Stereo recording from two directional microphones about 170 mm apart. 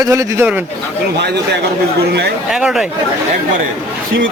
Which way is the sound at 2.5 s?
5° right (ahead or behind).